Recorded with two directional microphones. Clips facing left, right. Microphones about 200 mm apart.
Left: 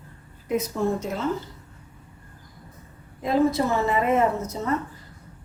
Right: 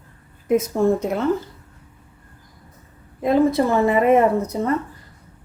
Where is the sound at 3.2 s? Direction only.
55° right (ahead or behind).